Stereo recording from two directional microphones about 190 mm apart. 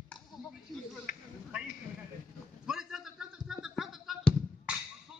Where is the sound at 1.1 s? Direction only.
45° left (ahead or behind).